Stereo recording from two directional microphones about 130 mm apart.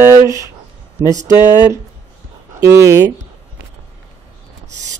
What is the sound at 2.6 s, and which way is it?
Speech, 20° right (ahead or behind).